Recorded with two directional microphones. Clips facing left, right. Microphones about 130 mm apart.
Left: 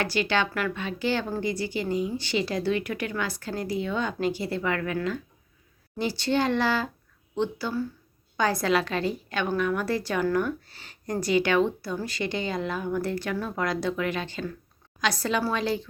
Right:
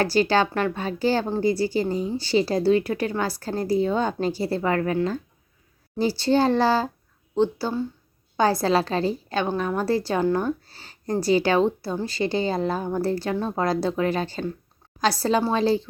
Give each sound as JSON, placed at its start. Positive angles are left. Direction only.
{"t": 0.0, "sound": "a woman's voice", "side_deg": -35}